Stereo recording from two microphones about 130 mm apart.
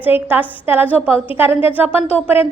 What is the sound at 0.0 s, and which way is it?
A woman's voice, 15° right (ahead or behind).